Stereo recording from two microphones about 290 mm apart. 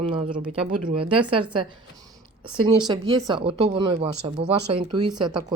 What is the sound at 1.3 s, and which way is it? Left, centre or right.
Speech, centre.